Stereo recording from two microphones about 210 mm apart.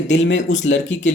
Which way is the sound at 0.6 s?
60° left (ahead or behind).